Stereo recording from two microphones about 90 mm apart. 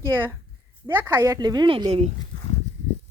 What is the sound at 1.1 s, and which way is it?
Speech, 40° right (ahead or behind).